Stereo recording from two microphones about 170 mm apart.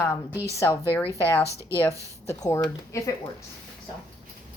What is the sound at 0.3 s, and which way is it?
Speech, 20° right (ahead or behind).